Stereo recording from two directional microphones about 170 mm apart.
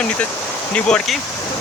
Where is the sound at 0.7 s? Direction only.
5° left (ahead or behind).